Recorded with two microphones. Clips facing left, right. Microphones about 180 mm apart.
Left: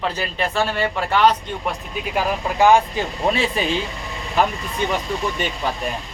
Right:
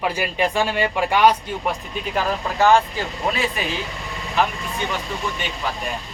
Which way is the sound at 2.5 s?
15° left (ahead or behind).